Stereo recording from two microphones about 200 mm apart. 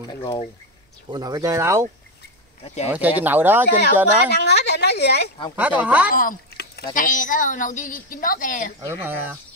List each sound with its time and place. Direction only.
0.1 s speech: 25° left (ahead or behind)
1.1 s speech: 20° right (ahead or behind)
2.6 s speech: 35° left (ahead or behind)
2.9 s speech: 10° right (ahead or behind)
3.8 s speech: 55° left (ahead or behind)
5.6 s speech: 10° right (ahead or behind)
6.1 s speech: 50° left (ahead or behind)